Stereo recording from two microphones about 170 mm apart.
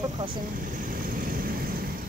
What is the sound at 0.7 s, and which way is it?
Vehicle, 55° right (ahead or behind).